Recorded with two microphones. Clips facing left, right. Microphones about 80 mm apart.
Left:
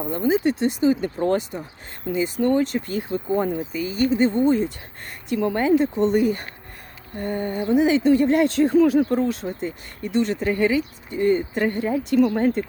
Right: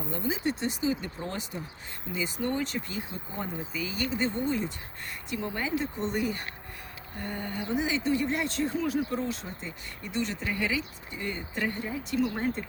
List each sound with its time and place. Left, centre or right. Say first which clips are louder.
0.1 s speech: left 10 dB; left
3.8 s speech: left 10 dB; left
5.3 s speech: left 12 dB; left